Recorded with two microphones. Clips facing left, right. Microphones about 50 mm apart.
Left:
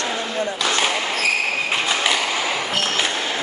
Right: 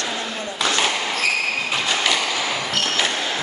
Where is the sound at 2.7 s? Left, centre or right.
Centre.